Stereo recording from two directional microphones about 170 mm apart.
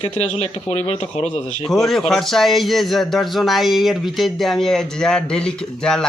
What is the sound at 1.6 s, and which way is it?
A man's voice, centre (ahead or behind).